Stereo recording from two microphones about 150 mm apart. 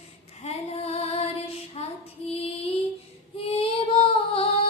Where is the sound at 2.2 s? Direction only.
45° left (ahead or behind).